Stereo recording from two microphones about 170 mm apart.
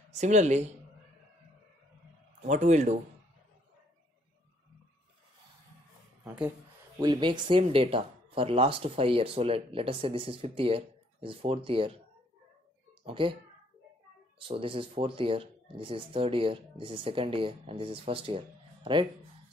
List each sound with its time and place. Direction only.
0.1 s speech: 45° right (ahead or behind)
2.4 s speech: 45° right (ahead or behind)
7.0 s speech: 25° right (ahead or behind)
13.0 s speech: 30° right (ahead or behind)
14.5 s speech: 30° right (ahead or behind)